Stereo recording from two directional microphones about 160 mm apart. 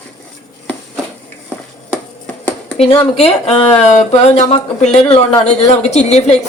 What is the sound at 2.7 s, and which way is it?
A woman's voice, 40° left (ahead or behind).